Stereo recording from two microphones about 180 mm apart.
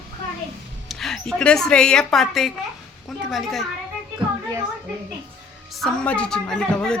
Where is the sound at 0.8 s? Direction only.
Centre (ahead or behind).